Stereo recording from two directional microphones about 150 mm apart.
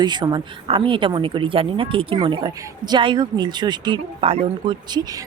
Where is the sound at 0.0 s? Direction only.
30° right (ahead or behind).